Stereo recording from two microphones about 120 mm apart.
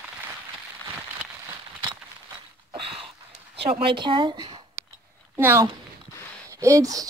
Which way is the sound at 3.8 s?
45° right (ahead or behind).